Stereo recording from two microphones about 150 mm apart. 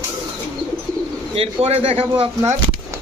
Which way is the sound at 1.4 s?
45° right (ahead or behind).